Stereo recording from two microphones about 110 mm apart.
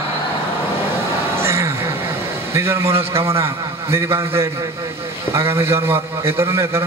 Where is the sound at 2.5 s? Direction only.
25° right (ahead or behind).